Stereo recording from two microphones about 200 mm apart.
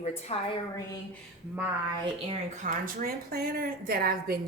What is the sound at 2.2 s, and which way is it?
A woman's voice, 40° right (ahead or behind).